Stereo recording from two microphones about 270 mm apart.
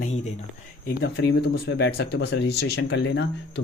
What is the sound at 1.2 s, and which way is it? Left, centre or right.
Speech, left.